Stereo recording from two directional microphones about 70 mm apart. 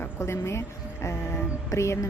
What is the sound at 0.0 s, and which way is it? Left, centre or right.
Speech, left.